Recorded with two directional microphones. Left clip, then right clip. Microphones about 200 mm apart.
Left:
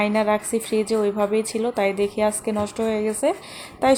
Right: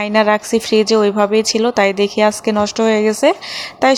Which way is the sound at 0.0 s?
20° right (ahead or behind).